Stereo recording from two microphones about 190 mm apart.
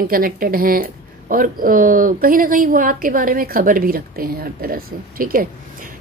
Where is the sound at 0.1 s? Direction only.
50° right (ahead or behind).